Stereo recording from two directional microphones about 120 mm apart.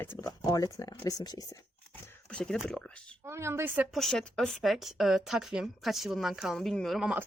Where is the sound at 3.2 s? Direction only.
20° right (ahead or behind).